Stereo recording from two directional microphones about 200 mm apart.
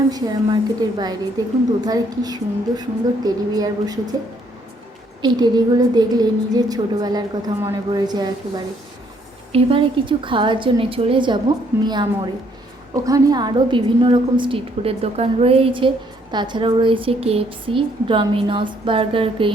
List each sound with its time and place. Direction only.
0.1 s a woman's voice: 20° right (ahead or behind)
5.2 s a woman's voice: 20° right (ahead or behind)